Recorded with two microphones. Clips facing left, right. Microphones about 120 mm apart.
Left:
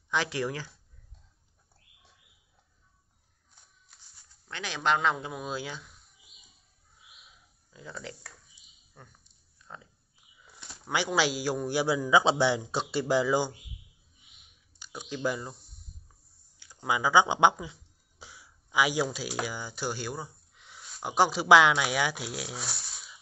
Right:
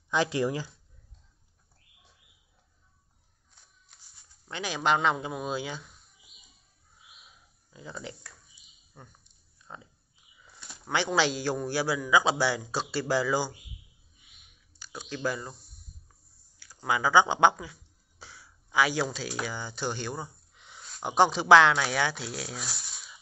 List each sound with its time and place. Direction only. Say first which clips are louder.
0.4 s speech: right 4 dB; 20° right (ahead or behind)
4.5 s speech: right 1 dB; 10° right (ahead or behind)
7.7 s speech: right 1 dB; 5° right (ahead or behind)
8.9 s a sound: right 2 dB; 10° right (ahead or behind)
10.9 s a man's voice: right 1 dB; 10° left (ahead or behind)
14.8 s speech: left 1 dB; 15° left (ahead or behind)
16.5 s speech: right 1 dB; 20° left (ahead or behind)
18.2 s a sound: right 1 dB; 15° left (ahead or behind)
19.1 s speech: even; 10° left (ahead or behind)